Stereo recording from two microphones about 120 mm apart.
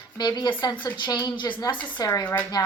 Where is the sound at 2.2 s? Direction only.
15° left (ahead or behind).